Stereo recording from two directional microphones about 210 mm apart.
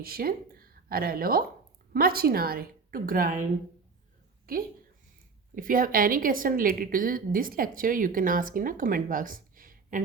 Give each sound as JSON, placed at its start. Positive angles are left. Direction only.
{"t": 0.0, "sound": "a woman's voice", "side_deg": -45}
{"t": 4.5, "sound": "a woman's voice", "side_deg": -45}